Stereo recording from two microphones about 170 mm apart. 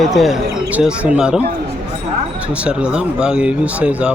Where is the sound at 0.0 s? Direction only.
Centre (ahead or behind).